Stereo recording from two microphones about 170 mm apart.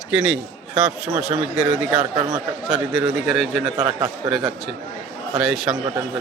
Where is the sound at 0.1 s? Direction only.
5° right (ahead or behind).